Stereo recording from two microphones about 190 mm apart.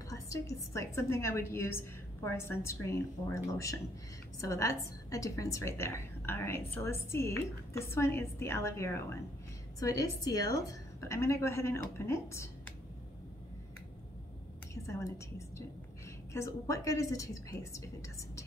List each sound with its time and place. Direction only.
0.1 s a woman's voice: 15° left (ahead or behind)
4.4 s a woman's voice: 15° left (ahead or behind)
14.7 s a woman's voice: 15° left (ahead or behind)